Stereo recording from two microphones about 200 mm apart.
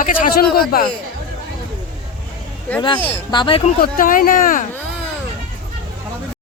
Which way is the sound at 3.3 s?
25° left (ahead or behind).